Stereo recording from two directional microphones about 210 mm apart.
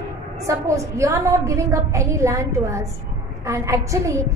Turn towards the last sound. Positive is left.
turn(degrees=-15)  # may be behind; listen again after turning